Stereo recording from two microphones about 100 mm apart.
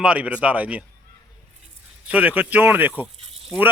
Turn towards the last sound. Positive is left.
turn(degrees=-75)  # may be behind; listen again after turning